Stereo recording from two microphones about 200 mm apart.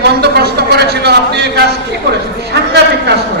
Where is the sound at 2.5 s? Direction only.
55° right (ahead or behind).